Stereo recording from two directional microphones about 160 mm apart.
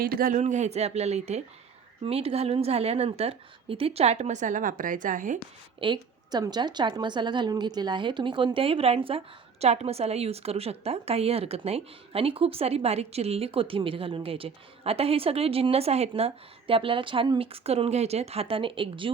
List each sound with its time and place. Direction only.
0.0 s a woman's voice: 60° right (ahead or behind)
5.8 s a woman's voice: 30° right (ahead or behind)